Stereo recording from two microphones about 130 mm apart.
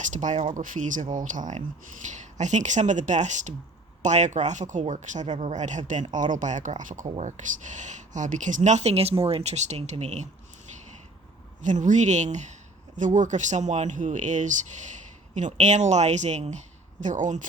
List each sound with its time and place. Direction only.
0.0 s speech: 70° right (ahead or behind)
0.5 s speech: 85° right
1.1 s speech: 80° right; by 10.2 s 60° right (ahead or behind)
11.6 s speech: 70° right (ahead or behind)